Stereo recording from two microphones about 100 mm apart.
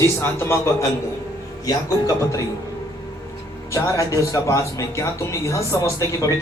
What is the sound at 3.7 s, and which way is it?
Speech, 35° left (ahead or behind).